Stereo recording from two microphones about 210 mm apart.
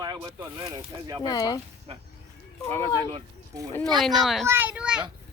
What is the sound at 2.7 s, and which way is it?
Speech, 15° left (ahead or behind).